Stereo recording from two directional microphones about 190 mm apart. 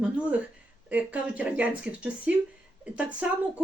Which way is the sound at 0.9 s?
5° right (ahead or behind).